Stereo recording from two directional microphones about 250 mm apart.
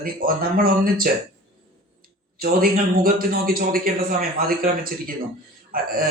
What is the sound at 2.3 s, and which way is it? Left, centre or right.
A man's voice, right.